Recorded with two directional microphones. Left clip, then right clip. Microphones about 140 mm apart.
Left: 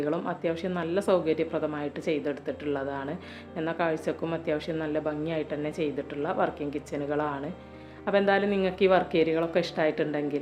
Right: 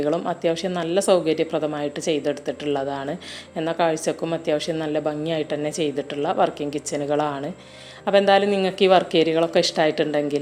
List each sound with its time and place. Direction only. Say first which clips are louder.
0.0 s a woman's voice: right 7 dB; 25° right (ahead or behind)